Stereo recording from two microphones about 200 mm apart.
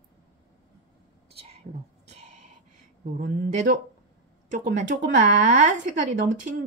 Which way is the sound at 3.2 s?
40° right (ahead or behind).